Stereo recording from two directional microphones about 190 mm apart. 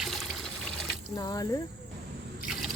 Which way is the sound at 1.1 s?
20° left (ahead or behind).